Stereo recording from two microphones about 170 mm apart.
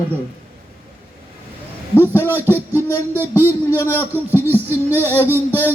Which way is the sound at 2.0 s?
15° left (ahead or behind).